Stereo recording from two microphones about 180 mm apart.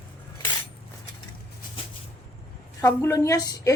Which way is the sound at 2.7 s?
15° left (ahead or behind).